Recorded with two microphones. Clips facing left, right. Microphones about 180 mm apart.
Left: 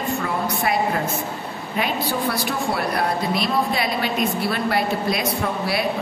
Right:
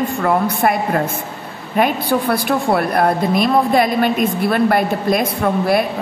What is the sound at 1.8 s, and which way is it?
A woman's voice, 55° right (ahead or behind).